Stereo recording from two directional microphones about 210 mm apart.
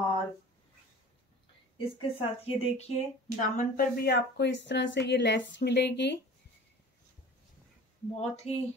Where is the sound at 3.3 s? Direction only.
40° left (ahead or behind).